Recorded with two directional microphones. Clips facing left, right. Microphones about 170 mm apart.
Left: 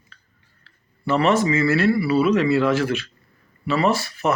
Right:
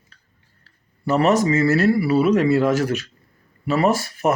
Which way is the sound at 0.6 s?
40° right (ahead or behind).